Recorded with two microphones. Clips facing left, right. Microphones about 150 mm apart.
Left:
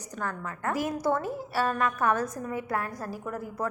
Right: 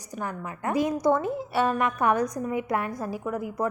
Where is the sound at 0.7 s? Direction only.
15° right (ahead or behind).